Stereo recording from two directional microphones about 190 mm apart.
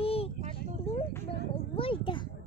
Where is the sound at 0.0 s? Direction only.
30° left (ahead or behind).